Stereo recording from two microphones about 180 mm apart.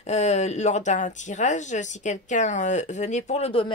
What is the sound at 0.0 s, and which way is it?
Speech, 40° left (ahead or behind).